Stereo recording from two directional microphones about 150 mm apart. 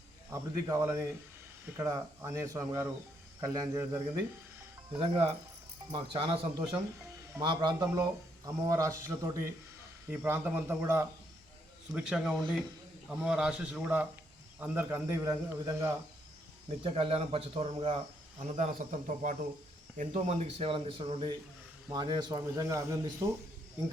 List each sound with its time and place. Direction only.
0.3 s a man's voice: 20° right (ahead or behind)
4.9 s a man's voice: 35° right (ahead or behind); by 11.0 s 15° right (ahead or behind)
11.9 s a man's voice: 5° right (ahead or behind); by 15.9 s 20° right (ahead or behind)
16.8 s a man's voice: 35° right (ahead or behind); by 19.4 s 55° right (ahead or behind)
20.0 s a man's voice: 45° right (ahead or behind); by 23.3 s 20° right (ahead or behind)